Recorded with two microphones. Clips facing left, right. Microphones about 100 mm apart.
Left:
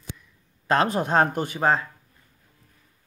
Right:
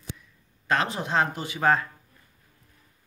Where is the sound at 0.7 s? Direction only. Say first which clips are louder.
Left 5 dB; 40° left (ahead or behind).